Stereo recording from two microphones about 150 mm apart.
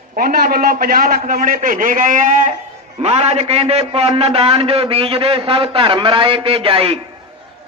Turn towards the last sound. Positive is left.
turn(degrees=-40)  # may be behind; listen again after turning